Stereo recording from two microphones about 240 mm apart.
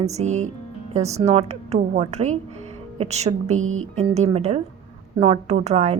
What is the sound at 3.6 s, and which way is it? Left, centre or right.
Music, right.